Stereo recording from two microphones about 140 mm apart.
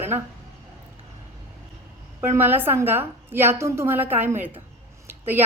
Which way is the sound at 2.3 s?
15° right (ahead or behind).